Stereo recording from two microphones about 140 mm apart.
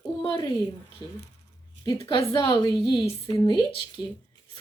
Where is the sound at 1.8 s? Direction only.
20° left (ahead or behind).